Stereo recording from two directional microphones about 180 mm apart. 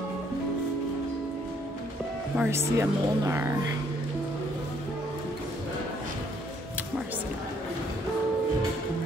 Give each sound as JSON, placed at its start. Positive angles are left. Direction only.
{"t": 2.3, "sound": "speech", "side_deg": -15}